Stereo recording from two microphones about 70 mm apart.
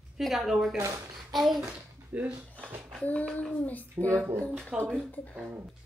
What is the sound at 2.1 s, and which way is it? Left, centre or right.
Dishes, right.